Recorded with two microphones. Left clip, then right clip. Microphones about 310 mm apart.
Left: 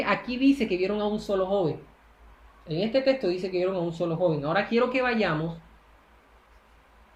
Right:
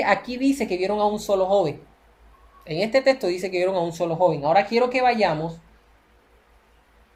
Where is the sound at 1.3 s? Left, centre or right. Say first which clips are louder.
Right 6 dB; right.